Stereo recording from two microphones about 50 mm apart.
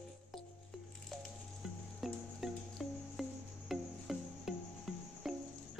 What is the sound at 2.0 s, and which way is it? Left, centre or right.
Music, centre.